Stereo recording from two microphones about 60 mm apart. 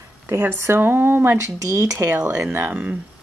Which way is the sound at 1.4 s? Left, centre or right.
Right.